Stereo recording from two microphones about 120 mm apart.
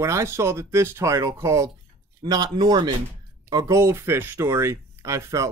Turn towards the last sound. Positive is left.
turn(degrees=-25)  # may be behind; listen again after turning